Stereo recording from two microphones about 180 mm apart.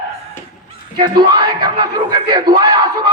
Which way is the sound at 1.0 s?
20° right (ahead or behind).